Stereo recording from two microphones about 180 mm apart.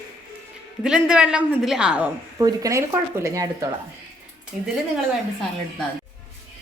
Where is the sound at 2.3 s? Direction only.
20° right (ahead or behind).